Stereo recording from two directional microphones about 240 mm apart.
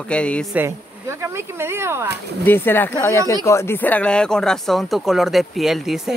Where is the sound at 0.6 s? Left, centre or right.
Centre.